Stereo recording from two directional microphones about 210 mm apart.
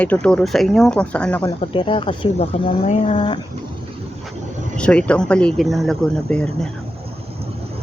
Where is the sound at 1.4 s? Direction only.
25° left (ahead or behind).